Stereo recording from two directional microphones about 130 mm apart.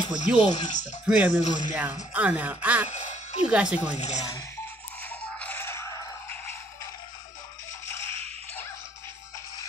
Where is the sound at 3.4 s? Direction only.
5° right (ahead or behind).